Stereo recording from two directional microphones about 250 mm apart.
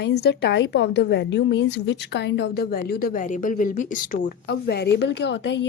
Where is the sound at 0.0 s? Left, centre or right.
Left.